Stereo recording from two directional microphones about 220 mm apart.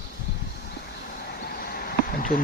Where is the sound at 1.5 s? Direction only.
45° left (ahead or behind).